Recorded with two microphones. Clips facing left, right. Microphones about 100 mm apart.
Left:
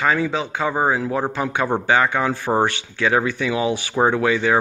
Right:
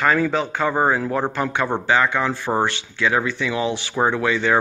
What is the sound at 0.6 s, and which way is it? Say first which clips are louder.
Speech: even; 5° left (ahead or behind).